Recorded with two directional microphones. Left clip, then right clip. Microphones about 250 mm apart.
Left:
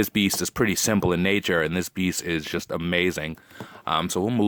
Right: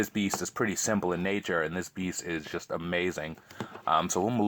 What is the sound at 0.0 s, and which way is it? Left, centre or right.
Speech, left.